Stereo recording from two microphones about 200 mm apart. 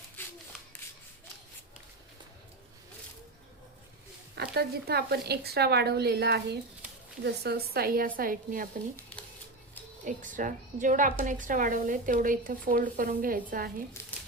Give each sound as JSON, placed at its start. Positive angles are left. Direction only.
{"t": 0.2, "sound": "a sound", "side_deg": 10}
{"t": 4.4, "sound": "speech", "side_deg": -55}
{"t": 10.0, "sound": "a woman's voice", "side_deg": -40}